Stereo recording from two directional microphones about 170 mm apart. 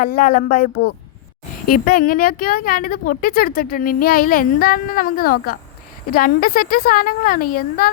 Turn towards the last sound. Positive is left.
turn(degrees=55)  # may be behind; listen again after turning